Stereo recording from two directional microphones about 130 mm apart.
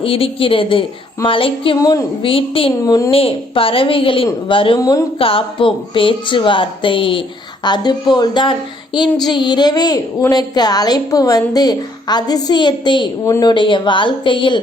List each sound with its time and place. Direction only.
0.0 s a woman's voice: 45° left (ahead or behind)
1.8 s a woman's voice: 30° left (ahead or behind)
2.2 s a woman's voice: 45° left (ahead or behind)
2.8 s a woman's voice: 25° left (ahead or behind)
3.1 s a woman's voice: 45° left (ahead or behind)
4.8 s a woman's voice: 25° left (ahead or behind)
5.2 s a child's voice: 45° left (ahead or behind)